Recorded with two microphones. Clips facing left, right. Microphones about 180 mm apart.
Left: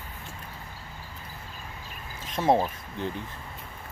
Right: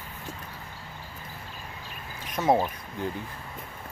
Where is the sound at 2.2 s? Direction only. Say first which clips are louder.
Even; 25° left (ahead or behind).